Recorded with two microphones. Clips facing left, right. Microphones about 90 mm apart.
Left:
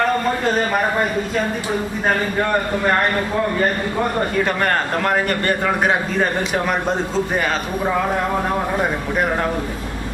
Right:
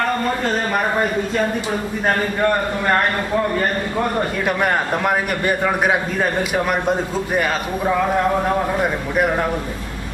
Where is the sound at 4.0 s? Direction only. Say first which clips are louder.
Left 2 dB; 5° right (ahead or behind).